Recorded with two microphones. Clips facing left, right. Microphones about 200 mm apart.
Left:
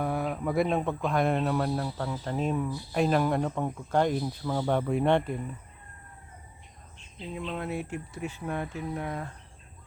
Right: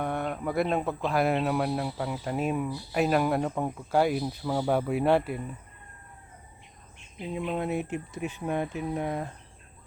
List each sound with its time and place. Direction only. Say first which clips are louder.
0.0 s speech: left 1 dB; centre (ahead or behind)
7.2 s speech: right 4 dB; 20° right (ahead or behind)